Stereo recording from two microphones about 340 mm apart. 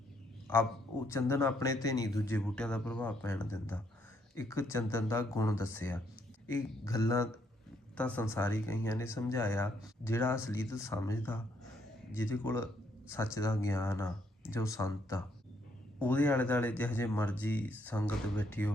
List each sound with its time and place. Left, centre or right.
1.0 s speech: centre